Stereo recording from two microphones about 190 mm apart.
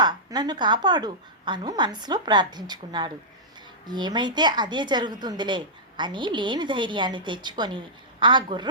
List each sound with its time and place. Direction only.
0.0 s a woman's voice: 20° right (ahead or behind)